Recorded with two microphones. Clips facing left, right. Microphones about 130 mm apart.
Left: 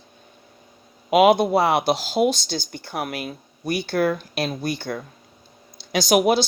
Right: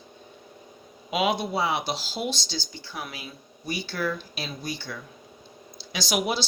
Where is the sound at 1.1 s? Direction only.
55° left (ahead or behind).